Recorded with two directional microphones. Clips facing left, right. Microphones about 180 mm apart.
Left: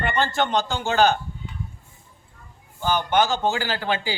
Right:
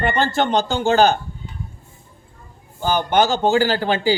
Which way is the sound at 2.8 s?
35° right (ahead or behind).